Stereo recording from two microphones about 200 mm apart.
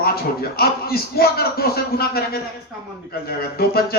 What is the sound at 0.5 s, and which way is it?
A man's voice, 50° left (ahead or behind).